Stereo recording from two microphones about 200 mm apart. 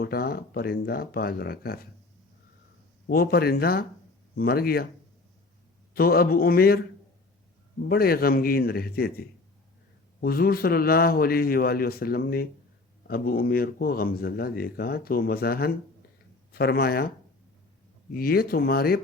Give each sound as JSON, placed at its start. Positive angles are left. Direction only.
{"t": 0.0, "sound": "speech", "side_deg": 50}
{"t": 3.1, "sound": "speech", "side_deg": 50}
{"t": 5.9, "sound": "speech", "side_deg": 50}
{"t": 7.9, "sound": "speech", "side_deg": 50}
{"t": 18.1, "sound": "speech", "side_deg": 50}